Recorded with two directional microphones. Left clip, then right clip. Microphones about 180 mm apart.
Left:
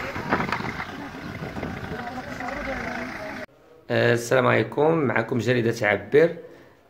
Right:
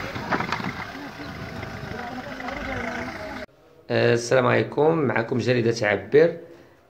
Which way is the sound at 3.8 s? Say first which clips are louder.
Right 1 dB; centre (ahead or behind).